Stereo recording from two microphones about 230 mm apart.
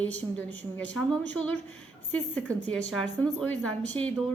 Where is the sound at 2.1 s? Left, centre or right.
Centre.